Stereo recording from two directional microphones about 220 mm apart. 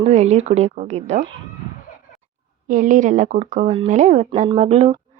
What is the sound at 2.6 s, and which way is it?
Speech, 35° right (ahead or behind).